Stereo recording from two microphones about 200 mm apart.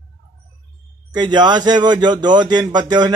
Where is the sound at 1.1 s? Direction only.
20° right (ahead or behind).